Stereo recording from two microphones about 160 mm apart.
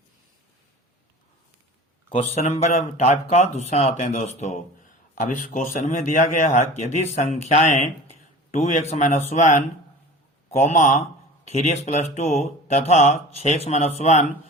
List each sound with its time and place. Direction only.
2.0 s speech: 40° left (ahead or behind)
10.6 s speech: 50° left (ahead or behind)